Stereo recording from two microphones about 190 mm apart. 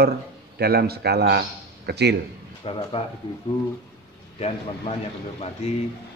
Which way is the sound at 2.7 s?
30° left (ahead or behind).